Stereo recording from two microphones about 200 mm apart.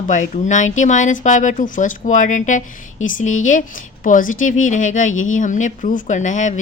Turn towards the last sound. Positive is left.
turn(degrees=35)  # may be behind; listen again after turning